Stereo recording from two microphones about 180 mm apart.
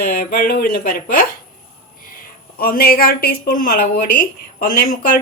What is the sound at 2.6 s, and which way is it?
Speech, 55° left (ahead or behind).